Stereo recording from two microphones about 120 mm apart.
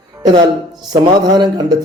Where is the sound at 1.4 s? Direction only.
35° right (ahead or behind).